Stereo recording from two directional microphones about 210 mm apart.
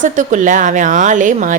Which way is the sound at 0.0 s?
35° right (ahead or behind).